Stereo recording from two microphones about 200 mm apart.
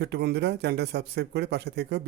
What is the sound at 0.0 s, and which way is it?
Speech, 55° right (ahead or behind).